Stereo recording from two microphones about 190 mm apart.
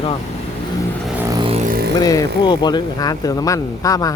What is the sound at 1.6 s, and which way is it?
Vehicle, 55° right (ahead or behind).